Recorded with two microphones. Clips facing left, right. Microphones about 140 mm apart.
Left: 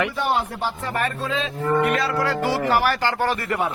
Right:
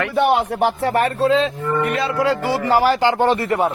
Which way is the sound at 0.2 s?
75° right (ahead or behind).